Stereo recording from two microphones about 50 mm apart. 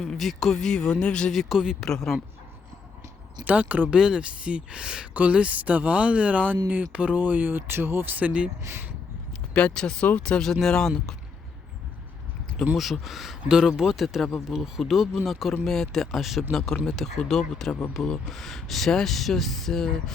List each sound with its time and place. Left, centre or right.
0.0 s speech: centre
1.3 s speech: centre
3.4 s speech: right
3.9 s speech: centre
4.2 s speech: right
9.5 s speech: left
10.4 s speech: centre
12.7 s speech: centre
16.5 s speech: centre